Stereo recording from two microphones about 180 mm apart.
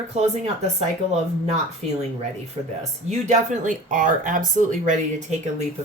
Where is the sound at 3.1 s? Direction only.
40° right (ahead or behind).